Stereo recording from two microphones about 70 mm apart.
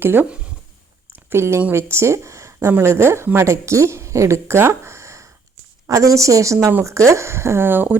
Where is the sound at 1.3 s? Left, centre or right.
Right.